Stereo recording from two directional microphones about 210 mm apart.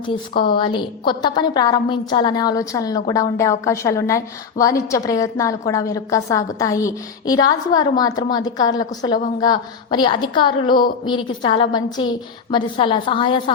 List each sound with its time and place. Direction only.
0.5 s a woman's voice: 25° left (ahead or behind)